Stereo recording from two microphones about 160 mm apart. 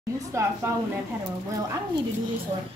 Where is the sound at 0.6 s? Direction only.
15° right (ahead or behind).